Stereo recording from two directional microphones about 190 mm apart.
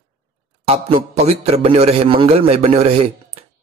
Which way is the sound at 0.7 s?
35° right (ahead or behind).